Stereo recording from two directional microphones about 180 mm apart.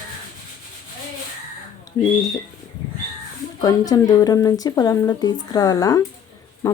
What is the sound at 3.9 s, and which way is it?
Speech, 20° left (ahead or behind).